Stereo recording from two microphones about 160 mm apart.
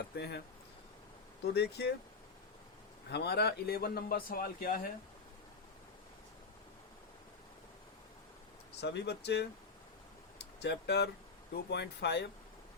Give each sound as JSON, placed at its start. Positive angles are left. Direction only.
{"t": 0.2, "sound": "speech", "side_deg": 90}
{"t": 1.5, "sound": "speech", "side_deg": 90}
{"t": 3.1, "sound": "a man's voice", "side_deg": 90}
{"t": 8.7, "sound": "speech", "side_deg": 90}
{"t": 10.6, "sound": "speech", "side_deg": 90}